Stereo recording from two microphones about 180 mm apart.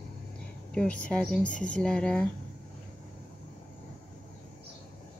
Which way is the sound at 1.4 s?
45° left (ahead or behind).